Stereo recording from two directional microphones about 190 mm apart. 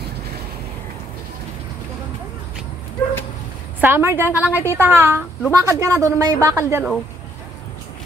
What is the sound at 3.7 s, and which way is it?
A woman's voice, 10° right (ahead or behind).